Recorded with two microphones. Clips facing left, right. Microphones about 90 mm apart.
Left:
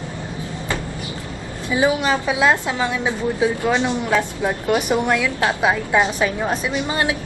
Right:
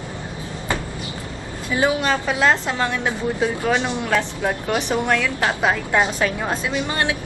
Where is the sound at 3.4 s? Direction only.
20° left (ahead or behind).